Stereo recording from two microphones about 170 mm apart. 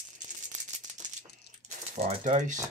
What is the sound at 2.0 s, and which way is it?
Speech, 40° right (ahead or behind).